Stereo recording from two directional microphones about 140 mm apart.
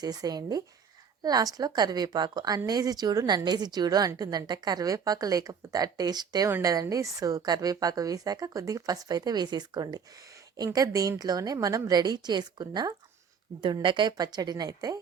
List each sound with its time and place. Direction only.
0.0 s a woman's voice: 30° right (ahead or behind)